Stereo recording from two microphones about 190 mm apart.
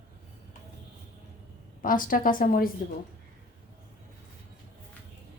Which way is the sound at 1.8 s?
45° left (ahead or behind).